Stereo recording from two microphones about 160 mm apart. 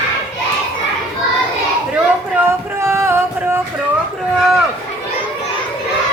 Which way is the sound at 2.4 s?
15° right (ahead or behind).